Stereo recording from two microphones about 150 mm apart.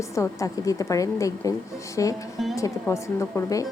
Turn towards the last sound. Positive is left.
turn(degrees=20)  # may be behind; listen again after turning